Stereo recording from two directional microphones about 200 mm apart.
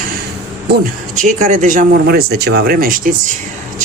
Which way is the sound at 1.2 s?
40° right (ahead or behind).